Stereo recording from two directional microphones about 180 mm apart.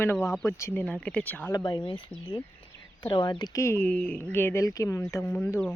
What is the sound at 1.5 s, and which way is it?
Speech, 25° left (ahead or behind).